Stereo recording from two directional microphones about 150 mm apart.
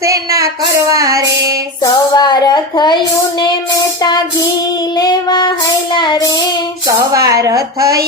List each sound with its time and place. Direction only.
0.0 s child singing: 20° right (ahead or behind)
1.8 s speech: 30° left (ahead or behind)
4.9 s child singing: 25° left (ahead or behind)
7.3 s speech: 20° right (ahead or behind)